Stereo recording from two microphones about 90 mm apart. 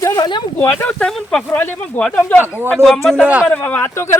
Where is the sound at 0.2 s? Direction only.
55° left (ahead or behind).